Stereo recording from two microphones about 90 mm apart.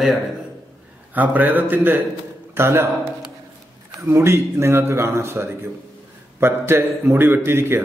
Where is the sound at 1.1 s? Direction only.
20° right (ahead or behind).